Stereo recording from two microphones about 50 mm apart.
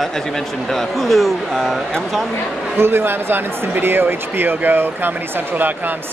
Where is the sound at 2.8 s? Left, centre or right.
Right.